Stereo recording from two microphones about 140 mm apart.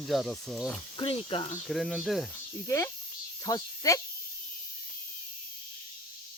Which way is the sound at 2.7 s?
20° left (ahead or behind).